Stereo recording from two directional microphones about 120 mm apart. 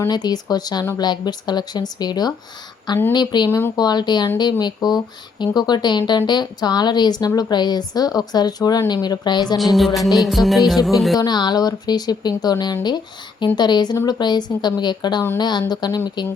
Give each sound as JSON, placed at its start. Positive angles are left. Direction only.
{"t": 0.1, "sound": "speech", "side_deg": 35}
{"t": 9.6, "sound": "speech", "side_deg": 0}
{"t": 11.2, "sound": "speech", "side_deg": 35}